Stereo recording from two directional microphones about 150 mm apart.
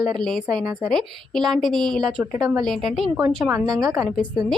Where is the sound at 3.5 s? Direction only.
25° right (ahead or behind).